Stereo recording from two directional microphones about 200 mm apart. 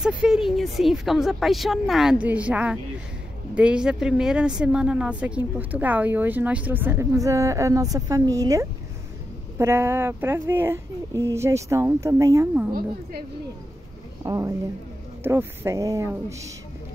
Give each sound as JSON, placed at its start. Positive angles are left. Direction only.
{"t": 0.0, "sound": "a woman's voice", "side_deg": 0}
{"t": 14.2, "sound": "a woman's voice", "side_deg": -15}